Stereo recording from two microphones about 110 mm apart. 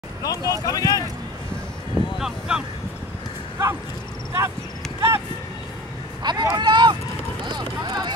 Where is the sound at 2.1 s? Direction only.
5° right (ahead or behind).